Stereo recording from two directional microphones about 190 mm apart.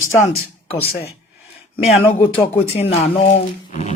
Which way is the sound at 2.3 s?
35° left (ahead or behind).